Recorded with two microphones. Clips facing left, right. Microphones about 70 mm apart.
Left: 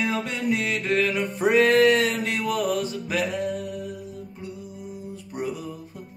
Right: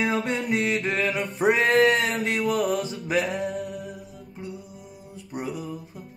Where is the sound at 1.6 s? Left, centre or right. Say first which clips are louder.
Left 4 dB; centre.